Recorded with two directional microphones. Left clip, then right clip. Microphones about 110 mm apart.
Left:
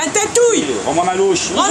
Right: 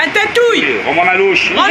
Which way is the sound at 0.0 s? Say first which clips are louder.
Right 3 dB; 20° left (ahead or behind).